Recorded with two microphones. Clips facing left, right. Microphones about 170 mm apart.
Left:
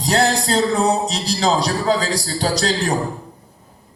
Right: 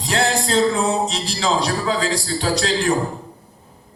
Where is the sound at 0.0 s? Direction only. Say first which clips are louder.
Left 3 dB; 40° left (ahead or behind).